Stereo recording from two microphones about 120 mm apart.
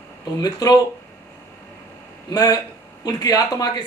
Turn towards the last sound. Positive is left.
turn(degrees=30)  # may be behind; listen again after turning